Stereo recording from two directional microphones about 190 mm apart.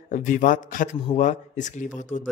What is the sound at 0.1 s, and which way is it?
Speech, 45° left (ahead or behind).